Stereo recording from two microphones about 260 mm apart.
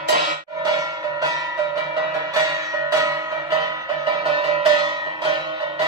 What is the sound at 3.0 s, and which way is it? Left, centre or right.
Music, centre.